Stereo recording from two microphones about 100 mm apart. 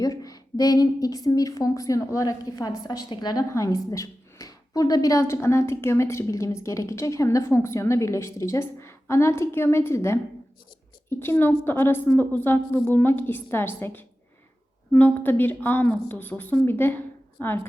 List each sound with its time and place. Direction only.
0.0 s a woman's voice: 35° left (ahead or behind)
3.5 s a woman's voice: 35° left (ahead or behind)